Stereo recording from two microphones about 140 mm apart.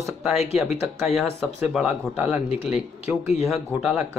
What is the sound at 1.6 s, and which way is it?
Speech, 10° right (ahead or behind).